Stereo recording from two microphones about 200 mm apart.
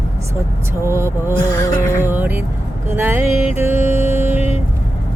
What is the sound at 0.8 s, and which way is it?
Vehicle, 10° right (ahead or behind).